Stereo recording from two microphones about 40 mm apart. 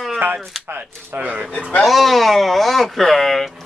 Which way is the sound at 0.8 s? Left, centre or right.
Right.